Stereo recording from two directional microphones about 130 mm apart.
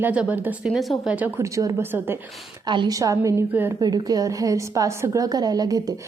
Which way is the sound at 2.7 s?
30° right (ahead or behind).